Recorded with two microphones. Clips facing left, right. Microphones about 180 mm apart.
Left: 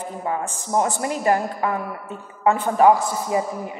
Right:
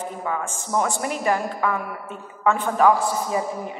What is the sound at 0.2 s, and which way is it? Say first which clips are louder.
A woman's voice: left 4 dB; 30° left (ahead or behind).